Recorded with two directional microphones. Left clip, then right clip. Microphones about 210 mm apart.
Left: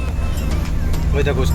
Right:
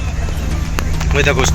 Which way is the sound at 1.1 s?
5° right (ahead or behind).